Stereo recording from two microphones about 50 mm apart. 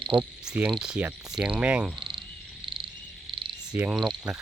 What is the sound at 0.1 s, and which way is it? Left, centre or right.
Speech, right.